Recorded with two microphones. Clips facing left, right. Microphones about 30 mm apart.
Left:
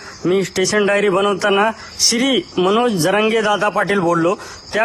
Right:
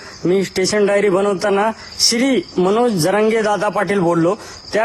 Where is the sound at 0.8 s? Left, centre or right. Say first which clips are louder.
Right 2 dB; left.